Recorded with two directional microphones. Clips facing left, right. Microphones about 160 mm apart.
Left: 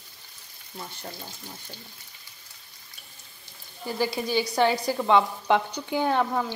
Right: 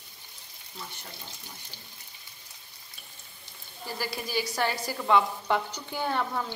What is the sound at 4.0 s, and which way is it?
Speech, 25° left (ahead or behind).